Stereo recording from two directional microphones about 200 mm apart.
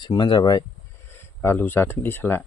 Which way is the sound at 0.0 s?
20° left (ahead or behind).